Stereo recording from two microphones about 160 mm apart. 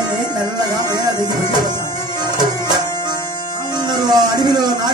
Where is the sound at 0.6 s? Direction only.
25° right (ahead or behind).